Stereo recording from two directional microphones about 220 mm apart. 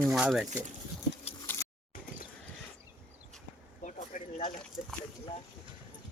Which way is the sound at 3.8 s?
35° left (ahead or behind).